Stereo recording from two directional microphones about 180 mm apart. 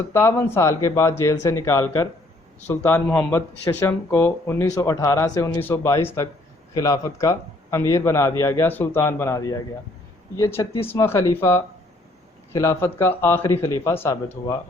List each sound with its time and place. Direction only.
0.1 s speech: 15° left (ahead or behind)